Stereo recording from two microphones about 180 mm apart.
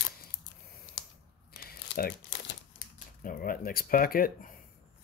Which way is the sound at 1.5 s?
60° left (ahead or behind).